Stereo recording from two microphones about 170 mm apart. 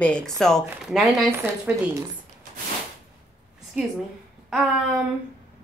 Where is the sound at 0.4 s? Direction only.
Centre (ahead or behind).